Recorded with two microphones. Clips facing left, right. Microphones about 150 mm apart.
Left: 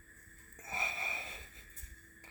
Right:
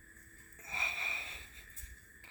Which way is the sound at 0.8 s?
45° left (ahead or behind).